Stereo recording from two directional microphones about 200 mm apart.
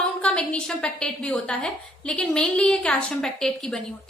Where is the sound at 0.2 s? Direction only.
5° left (ahead or behind).